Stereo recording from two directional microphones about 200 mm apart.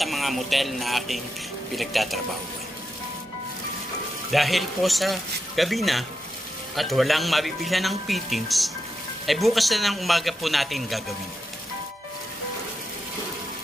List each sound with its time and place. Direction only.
0.0 s speech: centre (ahead or behind)
4.3 s speech: centre (ahead or behind)